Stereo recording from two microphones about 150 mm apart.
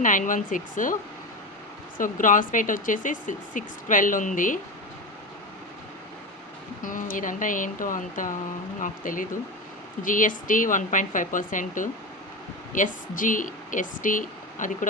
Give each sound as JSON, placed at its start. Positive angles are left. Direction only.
{"t": 0.0, "sound": "speech", "side_deg": 60}
{"t": 2.0, "sound": "speech", "side_deg": 65}
{"t": 6.8, "sound": "speech", "side_deg": 60}